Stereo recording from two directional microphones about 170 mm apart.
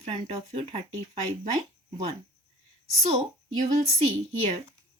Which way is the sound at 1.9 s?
35° right (ahead or behind).